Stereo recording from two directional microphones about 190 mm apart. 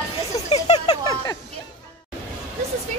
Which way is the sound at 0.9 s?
20° left (ahead or behind).